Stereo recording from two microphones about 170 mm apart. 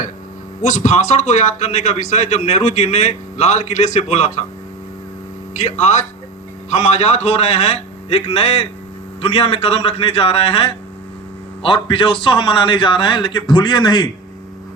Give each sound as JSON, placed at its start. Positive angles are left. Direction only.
{"t": 0.6, "sound": "a man's voice", "side_deg": 45}
{"t": 5.5, "sound": "a man's voice", "side_deg": 40}